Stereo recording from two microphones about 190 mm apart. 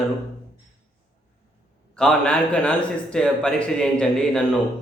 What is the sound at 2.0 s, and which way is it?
Speech, 5° left (ahead or behind).